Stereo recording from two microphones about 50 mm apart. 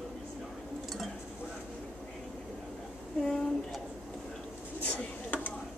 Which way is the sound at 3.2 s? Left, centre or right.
Centre.